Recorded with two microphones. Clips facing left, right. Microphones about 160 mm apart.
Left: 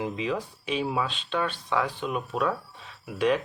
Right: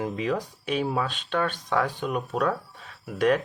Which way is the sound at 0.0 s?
50° right (ahead or behind).